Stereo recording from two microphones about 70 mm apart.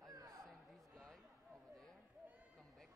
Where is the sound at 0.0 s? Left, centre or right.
Right.